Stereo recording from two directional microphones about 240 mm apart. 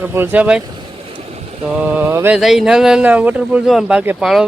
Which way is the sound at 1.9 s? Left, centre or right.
Centre.